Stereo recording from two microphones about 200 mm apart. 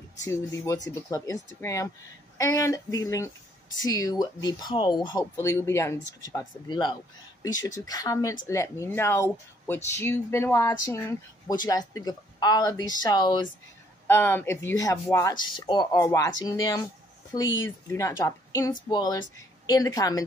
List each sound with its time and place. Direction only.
0.8 s speech: 15° left (ahead or behind)
5.3 s speech: 10° left (ahead or behind)